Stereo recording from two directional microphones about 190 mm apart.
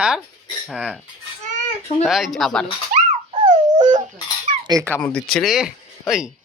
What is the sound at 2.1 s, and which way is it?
Speech, centre (ahead or behind).